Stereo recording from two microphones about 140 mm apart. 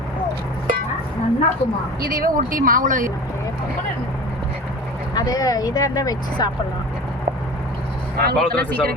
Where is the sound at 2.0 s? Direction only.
85° right; by 3.1 s 70° right (ahead or behind).